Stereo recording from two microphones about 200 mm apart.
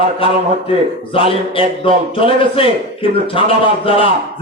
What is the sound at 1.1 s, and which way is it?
A man's voice, 25° left (ahead or behind).